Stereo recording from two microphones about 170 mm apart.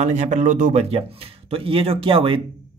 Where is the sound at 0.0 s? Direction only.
45° right (ahead or behind).